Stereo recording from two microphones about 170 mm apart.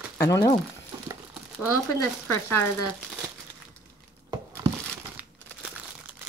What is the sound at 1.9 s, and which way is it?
Speech, 15° left (ahead or behind).